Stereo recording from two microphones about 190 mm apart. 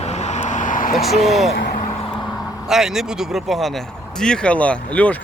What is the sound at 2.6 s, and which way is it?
Speech, centre (ahead or behind).